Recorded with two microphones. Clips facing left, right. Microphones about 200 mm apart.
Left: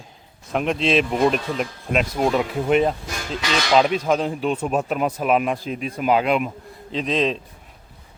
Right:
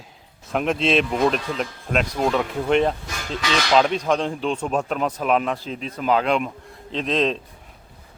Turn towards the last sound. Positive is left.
turn(degrees=0)  # may be behind; listen again after turning